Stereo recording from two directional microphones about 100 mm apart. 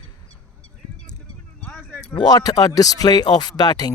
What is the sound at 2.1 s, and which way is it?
Speech, 45° left (ahead or behind).